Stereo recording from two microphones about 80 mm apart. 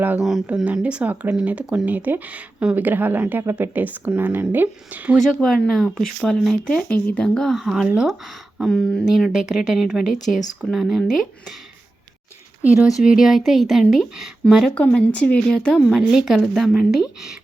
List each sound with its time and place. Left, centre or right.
0.2 s speech: centre
5.2 s speech: centre
6.8 s speech: centre
7.5 s speech: centre
9.1 s speech: centre
12.6 s speech: centre
14.8 s speech: left
15.9 s speech: centre